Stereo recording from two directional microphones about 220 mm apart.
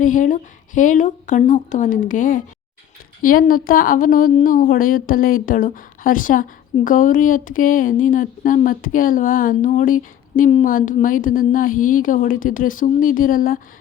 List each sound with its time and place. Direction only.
0.0 s a woman's voice: 35° left (ahead or behind)